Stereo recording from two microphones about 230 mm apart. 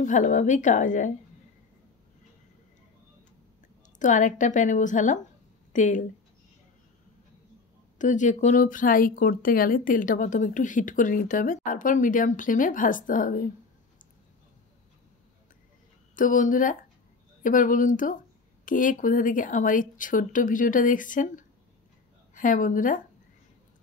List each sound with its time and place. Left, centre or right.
0.0 s speech: left
4.0 s speech: left
8.0 s speech: left
16.2 s a woman's voice: left